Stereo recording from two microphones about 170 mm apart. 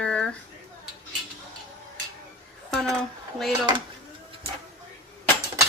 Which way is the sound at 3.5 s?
25° right (ahead or behind).